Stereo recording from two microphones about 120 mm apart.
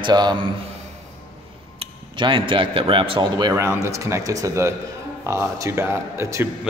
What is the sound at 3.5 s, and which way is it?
Speech, 25° right (ahead or behind).